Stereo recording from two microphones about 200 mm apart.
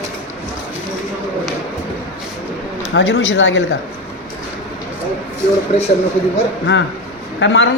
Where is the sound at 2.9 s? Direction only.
65° left (ahead or behind).